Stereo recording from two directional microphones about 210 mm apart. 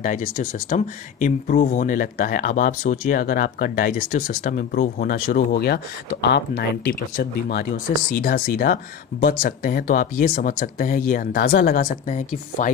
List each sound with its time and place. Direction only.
0.0 s speech: 40° left (ahead or behind)